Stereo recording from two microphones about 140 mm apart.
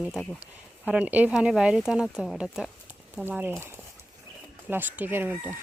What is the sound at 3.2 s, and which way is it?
Speech, 15° right (ahead or behind).